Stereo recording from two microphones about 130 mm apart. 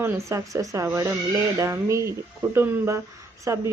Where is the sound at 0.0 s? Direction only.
20° right (ahead or behind).